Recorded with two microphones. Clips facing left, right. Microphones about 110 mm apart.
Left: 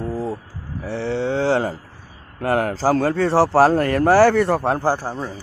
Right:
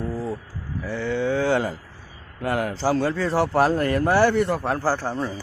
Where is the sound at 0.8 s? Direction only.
30° left (ahead or behind).